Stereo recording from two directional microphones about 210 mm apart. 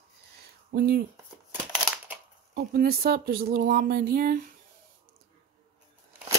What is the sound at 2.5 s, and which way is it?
Speech, 45° right (ahead or behind).